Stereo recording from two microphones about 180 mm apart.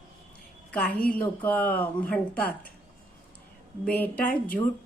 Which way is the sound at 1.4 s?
10° left (ahead or behind).